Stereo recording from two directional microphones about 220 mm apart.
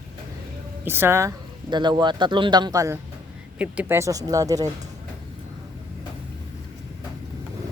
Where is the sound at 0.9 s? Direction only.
10° right (ahead or behind).